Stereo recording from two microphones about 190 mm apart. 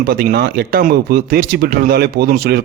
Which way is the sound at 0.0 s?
50° right (ahead or behind).